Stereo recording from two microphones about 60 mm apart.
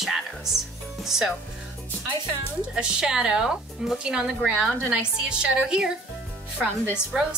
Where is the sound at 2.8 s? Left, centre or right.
Centre.